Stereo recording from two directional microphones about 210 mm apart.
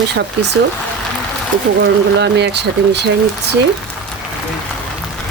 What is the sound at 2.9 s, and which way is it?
Speech, 55° right (ahead or behind).